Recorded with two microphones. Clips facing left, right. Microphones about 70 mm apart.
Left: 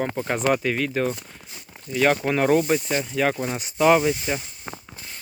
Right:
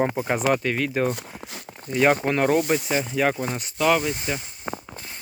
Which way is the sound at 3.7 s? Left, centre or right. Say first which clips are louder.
Left 4 dB; centre.